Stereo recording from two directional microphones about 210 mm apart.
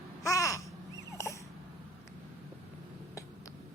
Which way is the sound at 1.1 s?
15° left (ahead or behind).